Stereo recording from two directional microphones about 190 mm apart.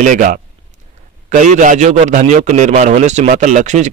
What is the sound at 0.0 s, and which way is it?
A man's voice, 45° right (ahead or behind).